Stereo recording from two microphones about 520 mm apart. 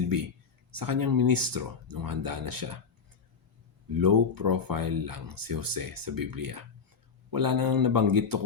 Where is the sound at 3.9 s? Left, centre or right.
Right.